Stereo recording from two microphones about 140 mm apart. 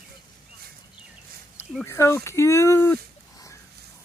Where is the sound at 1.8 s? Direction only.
20° left (ahead or behind).